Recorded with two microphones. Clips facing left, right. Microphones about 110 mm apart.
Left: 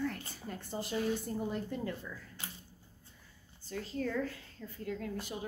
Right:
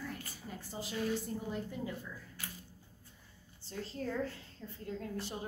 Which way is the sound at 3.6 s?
30° right (ahead or behind).